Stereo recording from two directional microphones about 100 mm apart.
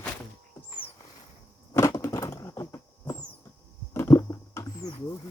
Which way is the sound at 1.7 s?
30° left (ahead or behind).